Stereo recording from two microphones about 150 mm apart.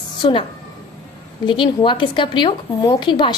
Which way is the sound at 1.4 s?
30° left (ahead or behind).